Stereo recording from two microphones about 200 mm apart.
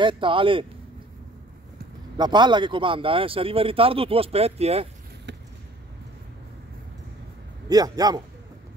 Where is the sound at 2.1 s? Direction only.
20° right (ahead or behind).